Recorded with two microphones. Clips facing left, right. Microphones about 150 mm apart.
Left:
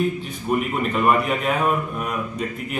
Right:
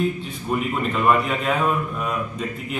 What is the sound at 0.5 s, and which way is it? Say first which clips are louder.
A man's voice: left 1 dB; 10° left (ahead or behind).